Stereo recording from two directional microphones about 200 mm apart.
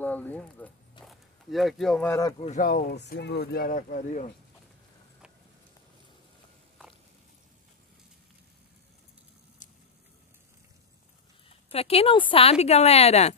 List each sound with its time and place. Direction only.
0.0 s speech: 10° left (ahead or behind)
2.4 s speech: 35° left (ahead or behind)
2.7 s speech: 50° left (ahead or behind)
9.6 s a sound: 40° left (ahead or behind)
11.4 s speech: 30° left (ahead or behind)